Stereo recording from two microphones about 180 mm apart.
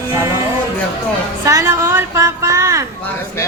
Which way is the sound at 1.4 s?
15° right (ahead or behind).